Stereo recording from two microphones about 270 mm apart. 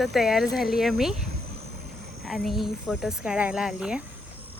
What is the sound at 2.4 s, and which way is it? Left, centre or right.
Speech, centre.